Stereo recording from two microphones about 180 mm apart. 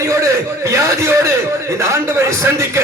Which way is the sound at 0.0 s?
15° right (ahead or behind).